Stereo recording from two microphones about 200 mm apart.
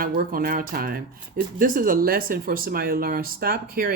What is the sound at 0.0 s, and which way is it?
Speech, 45° right (ahead or behind).